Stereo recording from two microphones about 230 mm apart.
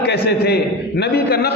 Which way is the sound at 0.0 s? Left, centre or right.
Left.